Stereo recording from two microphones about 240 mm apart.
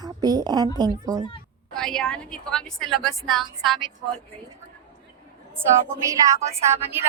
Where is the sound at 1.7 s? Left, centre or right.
Centre.